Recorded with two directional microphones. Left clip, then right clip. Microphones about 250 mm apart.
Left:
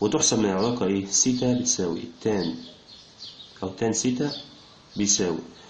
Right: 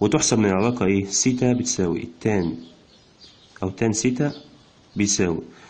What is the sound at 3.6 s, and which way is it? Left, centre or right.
Speech, right.